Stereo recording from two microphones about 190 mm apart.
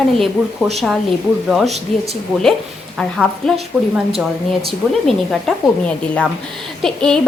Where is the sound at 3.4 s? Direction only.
Centre (ahead or behind).